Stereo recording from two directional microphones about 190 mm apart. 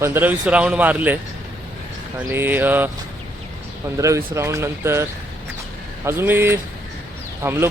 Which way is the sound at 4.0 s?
15° right (ahead or behind).